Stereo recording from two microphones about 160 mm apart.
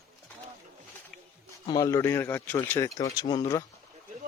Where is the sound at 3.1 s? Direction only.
25° left (ahead or behind).